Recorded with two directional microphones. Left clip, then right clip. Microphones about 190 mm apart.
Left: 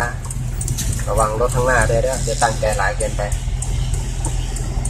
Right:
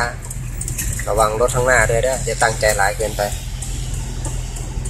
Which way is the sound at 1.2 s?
20° right (ahead or behind).